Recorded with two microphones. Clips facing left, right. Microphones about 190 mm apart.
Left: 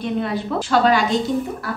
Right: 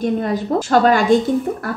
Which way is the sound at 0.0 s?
45° right (ahead or behind).